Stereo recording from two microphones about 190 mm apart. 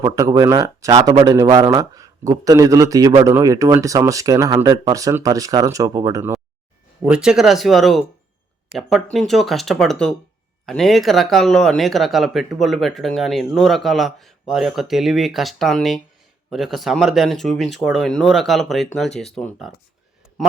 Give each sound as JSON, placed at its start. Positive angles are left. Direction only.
{"t": 0.0, "sound": "a man's voice", "side_deg": -20}
{"t": 7.0, "sound": "speech", "side_deg": -5}
{"t": 9.1, "sound": "speech", "side_deg": 0}